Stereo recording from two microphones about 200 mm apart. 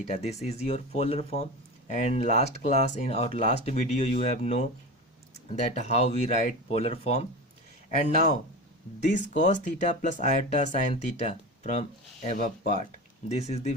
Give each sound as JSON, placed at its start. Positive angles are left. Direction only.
{"t": 0.0, "sound": "speech", "side_deg": 35}
{"t": 9.0, "sound": "speech", "side_deg": 35}